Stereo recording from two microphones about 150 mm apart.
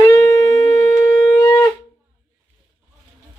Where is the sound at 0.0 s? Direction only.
20° left (ahead or behind).